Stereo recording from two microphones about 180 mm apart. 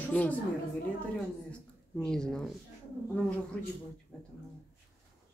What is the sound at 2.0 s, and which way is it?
Speech, 5° left (ahead or behind).